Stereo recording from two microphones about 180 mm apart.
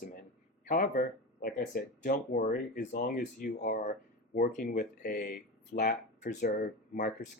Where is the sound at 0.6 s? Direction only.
50° left (ahead or behind).